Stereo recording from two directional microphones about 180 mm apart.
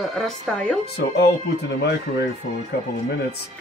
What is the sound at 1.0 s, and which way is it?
Speech, 70° left (ahead or behind).